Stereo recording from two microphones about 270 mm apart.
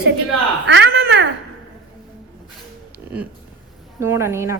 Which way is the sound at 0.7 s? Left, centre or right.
Right.